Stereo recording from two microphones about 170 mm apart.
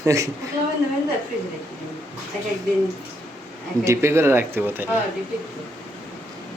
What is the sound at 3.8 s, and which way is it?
Speech, 15° right (ahead or behind).